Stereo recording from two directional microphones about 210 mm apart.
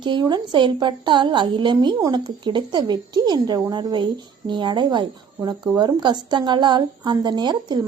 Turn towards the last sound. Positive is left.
turn(degrees=-20)  # may be behind; listen again after turning